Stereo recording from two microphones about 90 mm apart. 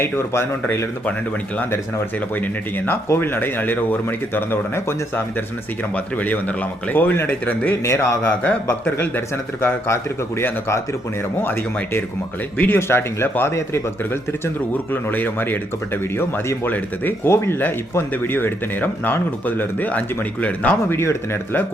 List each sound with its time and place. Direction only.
0.0 s speech: 30° left (ahead or behind)
7.9 s speech: 35° left (ahead or behind)
11.4 s speech: 25° left (ahead or behind)
21.0 s speech: 30° left (ahead or behind)